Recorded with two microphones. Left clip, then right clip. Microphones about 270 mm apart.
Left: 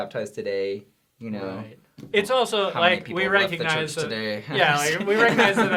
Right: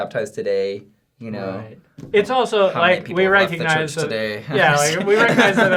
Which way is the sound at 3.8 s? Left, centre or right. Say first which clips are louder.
Right 5 dB; left.